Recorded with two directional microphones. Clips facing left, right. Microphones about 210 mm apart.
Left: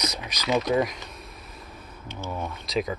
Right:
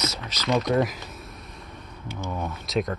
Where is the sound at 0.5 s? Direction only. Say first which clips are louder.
Right 1 dB; centre (ahead or behind).